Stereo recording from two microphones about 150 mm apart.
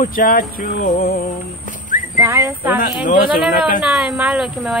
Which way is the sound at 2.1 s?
20° right (ahead or behind).